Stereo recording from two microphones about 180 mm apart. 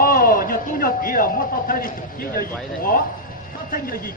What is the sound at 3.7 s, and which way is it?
Speech, 55° left (ahead or behind).